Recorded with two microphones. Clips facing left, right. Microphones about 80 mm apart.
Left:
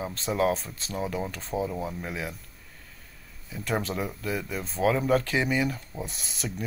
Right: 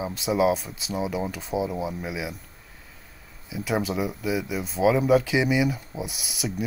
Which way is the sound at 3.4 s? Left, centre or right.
Centre.